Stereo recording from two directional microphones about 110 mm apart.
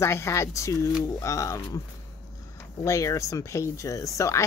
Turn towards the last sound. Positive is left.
turn(degrees=30)  # may be behind; listen again after turning